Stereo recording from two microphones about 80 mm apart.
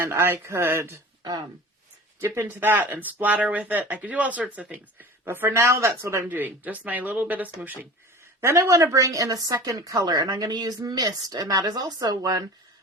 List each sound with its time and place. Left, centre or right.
0.0 s speech: right
1.2 s speech: right
2.2 s speech: right
5.2 s speech: right
6.2 s speech: right
8.5 s speech: right
10.1 s speech: right